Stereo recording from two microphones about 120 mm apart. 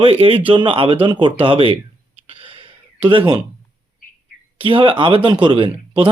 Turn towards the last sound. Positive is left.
turn(degrees=-45)  # may be behind; listen again after turning